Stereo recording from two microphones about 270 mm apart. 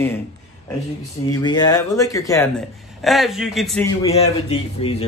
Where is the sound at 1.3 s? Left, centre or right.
Centre.